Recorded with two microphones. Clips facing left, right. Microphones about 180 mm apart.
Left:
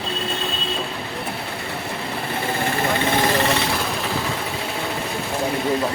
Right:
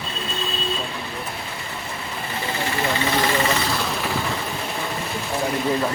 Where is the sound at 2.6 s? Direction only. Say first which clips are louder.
Left 1 dB; 55° left (ahead or behind).